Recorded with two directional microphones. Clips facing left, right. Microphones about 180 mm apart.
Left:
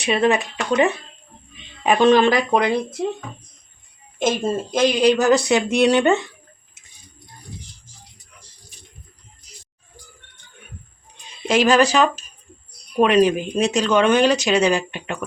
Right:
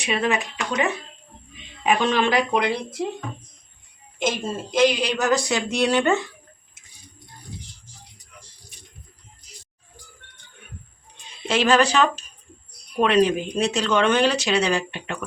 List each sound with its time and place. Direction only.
0.0 s speech: 35° left (ahead or behind)
4.2 s speech: 50° left (ahead or behind)
5.1 s speech: 25° left (ahead or behind)
11.4 s speech: 15° left (ahead or behind)